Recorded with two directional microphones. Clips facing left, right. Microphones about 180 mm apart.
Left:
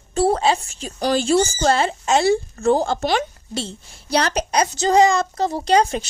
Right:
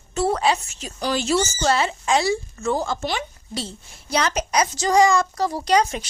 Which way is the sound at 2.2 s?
60° left (ahead or behind).